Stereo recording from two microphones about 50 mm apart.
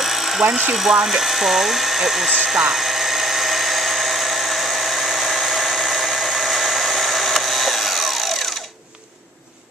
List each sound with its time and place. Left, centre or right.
0.0 s tools: centre
0.4 s speech: right
1.0 s speech: centre
2.7 s dental drill: centre